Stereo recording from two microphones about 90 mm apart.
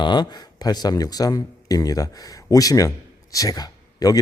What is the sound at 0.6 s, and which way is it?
A man's voice, 45° left (ahead or behind).